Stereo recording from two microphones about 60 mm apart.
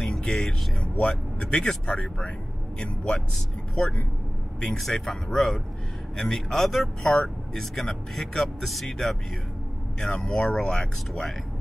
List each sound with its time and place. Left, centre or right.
0.0 s vehicle: centre
2.8 s speech: centre
4.7 s speech: centre